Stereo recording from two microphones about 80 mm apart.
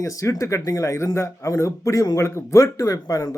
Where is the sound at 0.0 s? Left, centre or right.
Left.